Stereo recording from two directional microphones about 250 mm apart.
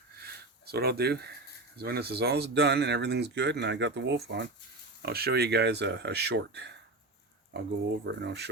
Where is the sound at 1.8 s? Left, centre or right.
Right.